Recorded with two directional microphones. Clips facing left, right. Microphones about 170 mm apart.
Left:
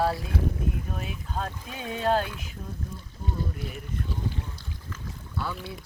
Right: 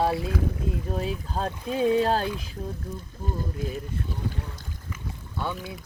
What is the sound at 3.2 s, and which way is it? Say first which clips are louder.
Speech: right 2 dB; 45° right (ahead or behind).